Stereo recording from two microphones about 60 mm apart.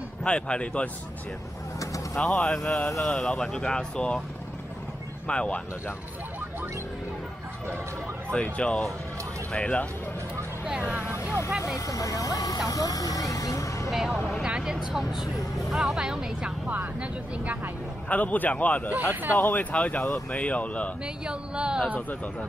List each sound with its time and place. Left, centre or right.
0.2 s speech: centre
2.1 s speech: centre
5.3 s speech: centre
8.3 s speech: centre
11.1 s vehicle: left
11.6 s speech: left
13.8 s speech: centre
18.0 s speech: left
21.3 s speech: centre